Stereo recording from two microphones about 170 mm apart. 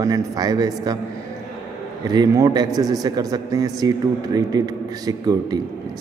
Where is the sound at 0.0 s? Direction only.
20° right (ahead or behind).